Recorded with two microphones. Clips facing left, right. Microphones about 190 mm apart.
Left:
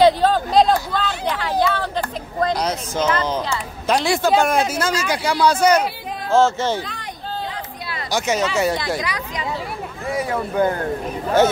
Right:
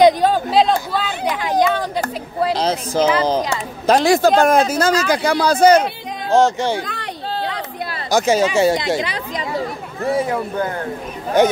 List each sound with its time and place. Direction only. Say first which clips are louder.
0.0 s speech: right 2 dB; 10° right (ahead or behind)
2.5 s speech: right 4 dB; 30° right (ahead or behind)
6.3 s speech: right 2 dB; 15° right (ahead or behind)
6.8 s a sound: right 4 dB; 60° right (ahead or behind)
8.1 s speech: right 5 dB; 35° right (ahead or behind)
10.6 s speech: left 8 dB; 20° left (ahead or behind)
11.4 s speech: right 2 dB; 15° right (ahead or behind)